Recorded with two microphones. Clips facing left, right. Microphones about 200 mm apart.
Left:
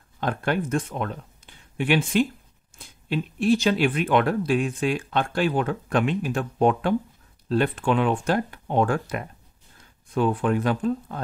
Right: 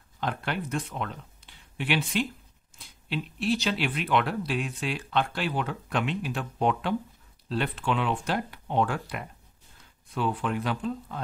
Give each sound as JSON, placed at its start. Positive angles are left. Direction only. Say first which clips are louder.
{"t": 0.2, "sound": "speech", "louder": "left 6 dB", "side_deg": 50}